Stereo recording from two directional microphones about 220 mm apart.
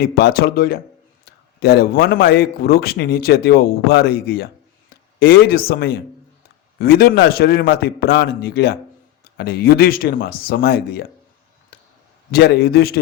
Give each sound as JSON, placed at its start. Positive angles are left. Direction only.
{"t": 0.0, "sound": "a man's voice", "side_deg": 45}
{"t": 11.7, "sound": "a sound", "side_deg": 45}
{"t": 12.3, "sound": "a man's voice", "side_deg": 45}